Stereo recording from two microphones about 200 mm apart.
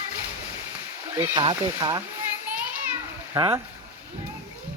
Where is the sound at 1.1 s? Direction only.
25° right (ahead or behind).